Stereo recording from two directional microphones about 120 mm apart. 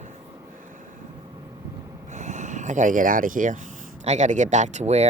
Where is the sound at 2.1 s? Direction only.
90° right.